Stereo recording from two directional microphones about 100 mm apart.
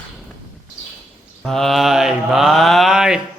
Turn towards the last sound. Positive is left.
turn(degrees=-5)  # may be behind; listen again after turning